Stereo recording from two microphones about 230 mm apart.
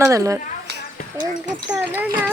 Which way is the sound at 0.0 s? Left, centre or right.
Centre.